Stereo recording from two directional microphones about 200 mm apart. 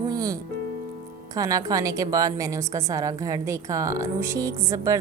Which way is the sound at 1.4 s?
15° right (ahead or behind).